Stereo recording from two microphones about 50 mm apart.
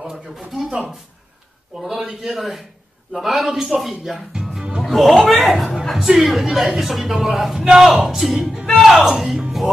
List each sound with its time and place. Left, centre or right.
0.0 s a sound: centre
0.7 s speech: right
1.8 s a man's voice: centre
4.6 s music: centre
4.8 s a man's voice: centre
8.6 s music: centre
9.0 s speech: centre